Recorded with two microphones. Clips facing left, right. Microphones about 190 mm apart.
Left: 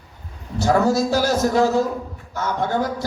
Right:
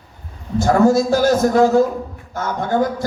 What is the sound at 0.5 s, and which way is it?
A man's voice, 50° right (ahead or behind).